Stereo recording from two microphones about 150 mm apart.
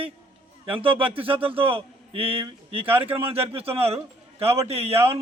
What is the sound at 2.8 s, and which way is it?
A man's voice, 40° right (ahead or behind).